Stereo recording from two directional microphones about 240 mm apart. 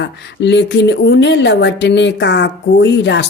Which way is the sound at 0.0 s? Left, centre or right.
Left.